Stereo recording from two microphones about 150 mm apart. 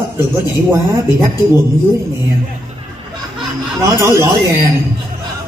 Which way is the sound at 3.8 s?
20° right (ahead or behind).